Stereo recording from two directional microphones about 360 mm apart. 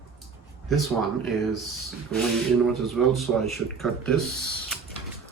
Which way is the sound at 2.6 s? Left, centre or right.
Centre.